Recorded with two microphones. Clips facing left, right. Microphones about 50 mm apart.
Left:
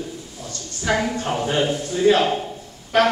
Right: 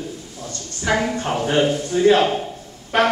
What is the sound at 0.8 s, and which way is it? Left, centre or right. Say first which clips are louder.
A man's voice: right 1 dB; centre.